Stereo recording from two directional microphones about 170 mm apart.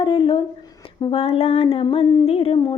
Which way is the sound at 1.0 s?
35° left (ahead or behind).